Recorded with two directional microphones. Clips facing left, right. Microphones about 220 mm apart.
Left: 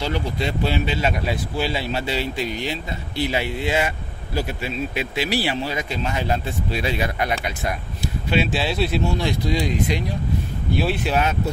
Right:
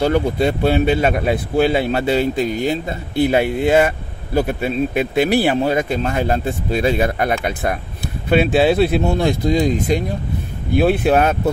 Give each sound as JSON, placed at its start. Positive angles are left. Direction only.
{"t": 0.0, "sound": "speech", "side_deg": -55}